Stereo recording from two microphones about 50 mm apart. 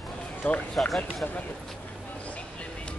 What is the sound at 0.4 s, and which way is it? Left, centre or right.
Speech, left.